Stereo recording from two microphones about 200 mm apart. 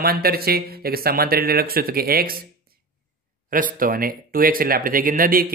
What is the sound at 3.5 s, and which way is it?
Speech, 45° right (ahead or behind).